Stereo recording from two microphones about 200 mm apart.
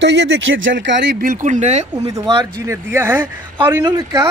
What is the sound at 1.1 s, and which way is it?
Speech, 45° right (ahead or behind).